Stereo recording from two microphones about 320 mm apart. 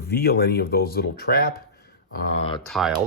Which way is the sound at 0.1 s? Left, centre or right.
Left.